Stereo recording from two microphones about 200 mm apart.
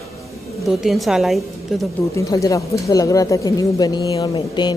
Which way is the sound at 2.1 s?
15° left (ahead or behind).